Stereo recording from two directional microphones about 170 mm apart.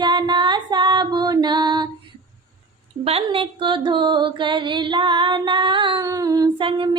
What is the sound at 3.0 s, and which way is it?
Female singing, 35° right (ahead or behind).